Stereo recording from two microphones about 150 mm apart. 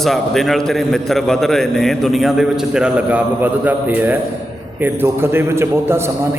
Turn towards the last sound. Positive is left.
turn(degrees=-15)  # may be behind; listen again after turning